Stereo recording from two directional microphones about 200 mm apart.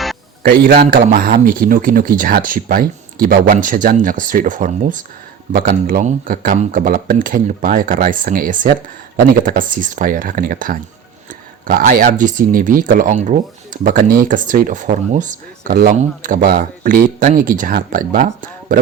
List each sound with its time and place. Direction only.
0.4 s speech: 45° right (ahead or behind)